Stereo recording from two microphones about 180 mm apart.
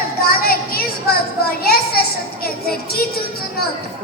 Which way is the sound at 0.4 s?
55° left (ahead or behind).